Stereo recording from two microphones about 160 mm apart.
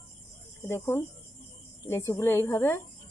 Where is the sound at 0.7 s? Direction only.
15° left (ahead or behind).